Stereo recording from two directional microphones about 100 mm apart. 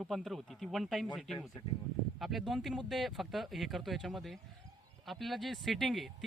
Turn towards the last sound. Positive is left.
turn(degrees=0)  # may be behind; listen again after turning